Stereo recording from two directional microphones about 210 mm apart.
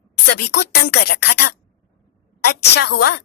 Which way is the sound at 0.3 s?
50° left (ahead or behind).